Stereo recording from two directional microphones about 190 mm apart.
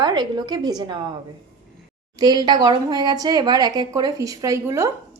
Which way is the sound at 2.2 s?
20° right (ahead or behind).